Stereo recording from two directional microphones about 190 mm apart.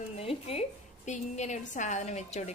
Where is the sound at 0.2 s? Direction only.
30° left (ahead or behind).